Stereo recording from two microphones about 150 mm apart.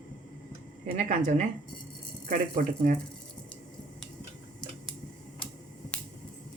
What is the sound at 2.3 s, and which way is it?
Speech, 60° right (ahead or behind).